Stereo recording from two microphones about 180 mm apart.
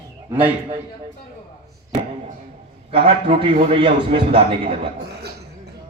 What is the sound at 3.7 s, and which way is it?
Speech, 30° right (ahead or behind).